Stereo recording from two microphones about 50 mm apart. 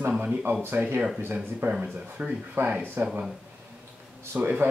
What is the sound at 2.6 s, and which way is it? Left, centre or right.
Speech, right.